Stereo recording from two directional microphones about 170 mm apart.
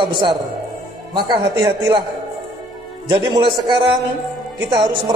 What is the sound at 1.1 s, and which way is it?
Speech, 25° right (ahead or behind).